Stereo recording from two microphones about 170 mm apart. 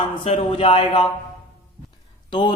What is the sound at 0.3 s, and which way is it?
Speech, 30° left (ahead or behind).